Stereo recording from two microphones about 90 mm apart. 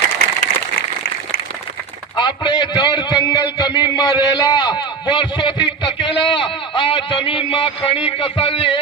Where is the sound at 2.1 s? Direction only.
55° left (ahead or behind).